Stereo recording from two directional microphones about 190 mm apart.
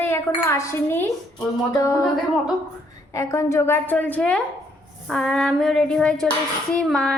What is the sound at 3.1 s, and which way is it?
A woman's voice, 15° left (ahead or behind).